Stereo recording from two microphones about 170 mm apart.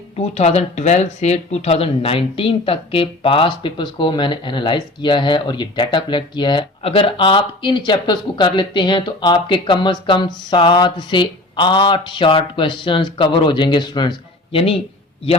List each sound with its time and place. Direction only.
0.2 s speech: 40° left (ahead or behind)